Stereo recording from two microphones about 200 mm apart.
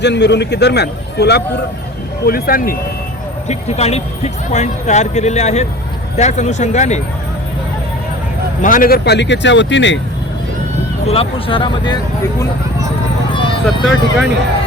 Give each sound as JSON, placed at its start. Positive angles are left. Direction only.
{"t": 0.0, "sound": "speech", "side_deg": 60}
{"t": 3.5, "sound": "speech", "side_deg": 30}
{"t": 8.6, "sound": "speech", "side_deg": 40}
{"t": 11.0, "sound": "speech", "side_deg": 30}
{"t": 13.7, "sound": "speech", "side_deg": 0}